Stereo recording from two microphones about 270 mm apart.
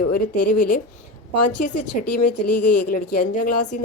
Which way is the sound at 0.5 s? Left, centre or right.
Left.